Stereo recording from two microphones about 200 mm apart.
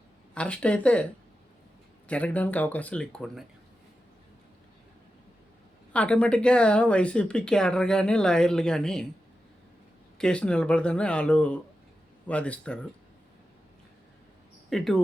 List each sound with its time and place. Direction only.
0.3 s speech: 5° left (ahead or behind)
2.0 s speech: 5° left (ahead or behind)
5.9 s speech: 5° left (ahead or behind)
10.2 s speech: 5° left (ahead or behind)
14.7 s speech: centre (ahead or behind)